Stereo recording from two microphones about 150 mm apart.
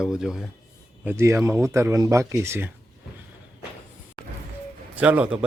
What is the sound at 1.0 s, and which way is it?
A man's voice, 15° right (ahead or behind).